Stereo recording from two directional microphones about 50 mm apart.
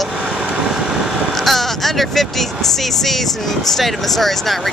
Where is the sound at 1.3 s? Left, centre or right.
Centre.